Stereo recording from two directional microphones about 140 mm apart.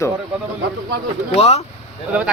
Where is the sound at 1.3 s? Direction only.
50° left (ahead or behind).